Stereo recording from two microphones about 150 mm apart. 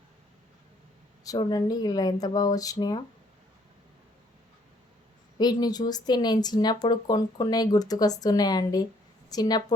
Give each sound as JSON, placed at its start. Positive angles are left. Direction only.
{"t": 1.2, "sound": "speech", "side_deg": 25}
{"t": 5.4, "sound": "speech", "side_deg": 25}